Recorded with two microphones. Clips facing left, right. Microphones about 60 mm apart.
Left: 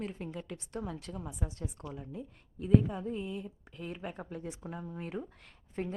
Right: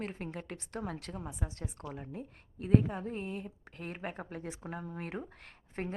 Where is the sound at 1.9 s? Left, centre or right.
Right.